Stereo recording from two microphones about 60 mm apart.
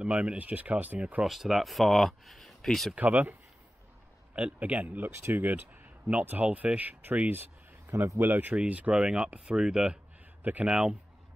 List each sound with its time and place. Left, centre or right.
0.0 s speech: centre
1.2 s speech: centre
2.9 s speech: right
4.4 s speech: right
8.5 s speech: right
10.4 s speech: right
10.7 s speech: centre